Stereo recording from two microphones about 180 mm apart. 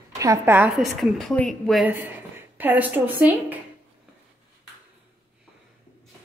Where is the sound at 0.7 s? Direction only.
Centre (ahead or behind).